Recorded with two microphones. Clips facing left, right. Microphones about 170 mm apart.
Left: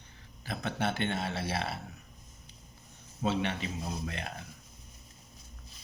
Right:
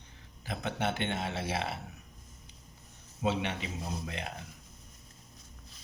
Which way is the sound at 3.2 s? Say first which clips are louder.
Left 1 dB; 15° right (ahead or behind).